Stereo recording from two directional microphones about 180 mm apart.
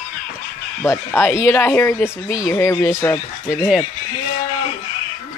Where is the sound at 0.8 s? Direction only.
15° left (ahead or behind).